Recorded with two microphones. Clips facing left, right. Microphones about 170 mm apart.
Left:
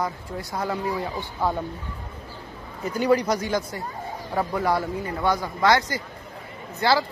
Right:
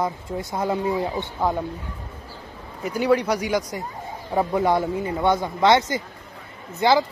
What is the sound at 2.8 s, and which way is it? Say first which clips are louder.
Speech: right 1 dB; 10° right (ahead or behind).